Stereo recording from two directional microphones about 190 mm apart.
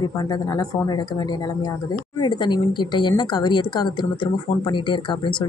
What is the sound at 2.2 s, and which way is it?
Speech, 25° left (ahead or behind).